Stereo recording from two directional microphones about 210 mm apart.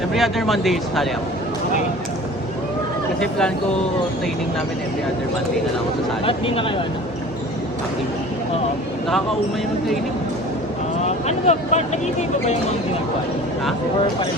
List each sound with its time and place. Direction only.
0.1 s speech: centre (ahead or behind)
3.2 s speech: 5° left (ahead or behind)
6.2 s speech: 25° left (ahead or behind)
11.0 s speech: 30° left (ahead or behind)